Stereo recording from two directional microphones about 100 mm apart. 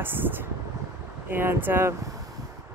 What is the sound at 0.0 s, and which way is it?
Speech, 20° right (ahead or behind).